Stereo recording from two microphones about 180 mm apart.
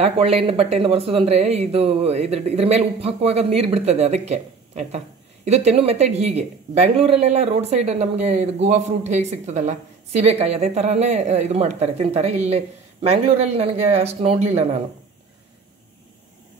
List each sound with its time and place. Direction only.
0.0 s speech: 35° right (ahead or behind)